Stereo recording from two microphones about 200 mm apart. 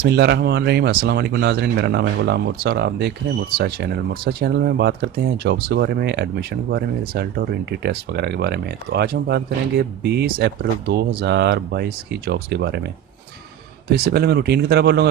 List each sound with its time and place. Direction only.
0.1 s speech: 55° right (ahead or behind)
13.9 s speech: 50° right (ahead or behind)